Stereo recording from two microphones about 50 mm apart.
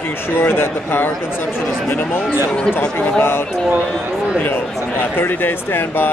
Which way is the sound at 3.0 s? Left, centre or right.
Left.